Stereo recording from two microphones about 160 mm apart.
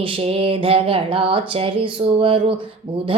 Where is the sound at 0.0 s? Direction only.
35° right (ahead or behind).